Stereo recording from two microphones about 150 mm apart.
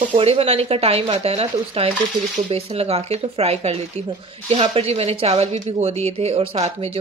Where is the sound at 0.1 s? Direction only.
40° right (ahead or behind).